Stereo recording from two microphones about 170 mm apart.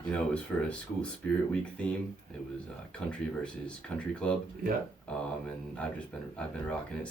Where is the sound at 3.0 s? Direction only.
5° left (ahead or behind).